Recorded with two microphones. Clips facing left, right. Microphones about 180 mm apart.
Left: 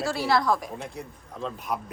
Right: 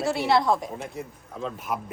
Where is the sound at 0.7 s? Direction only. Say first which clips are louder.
Right 2 dB; centre (ahead or behind).